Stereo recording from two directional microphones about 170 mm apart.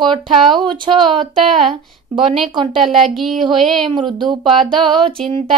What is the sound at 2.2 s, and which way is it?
A child's voice, centre (ahead or behind).